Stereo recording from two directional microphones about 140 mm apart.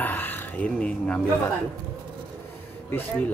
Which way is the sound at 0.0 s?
15° left (ahead or behind).